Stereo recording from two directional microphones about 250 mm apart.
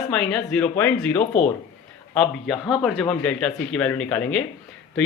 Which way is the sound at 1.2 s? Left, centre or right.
Left.